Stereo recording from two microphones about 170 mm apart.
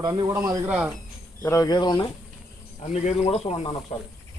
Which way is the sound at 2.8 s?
40° left (ahead or behind).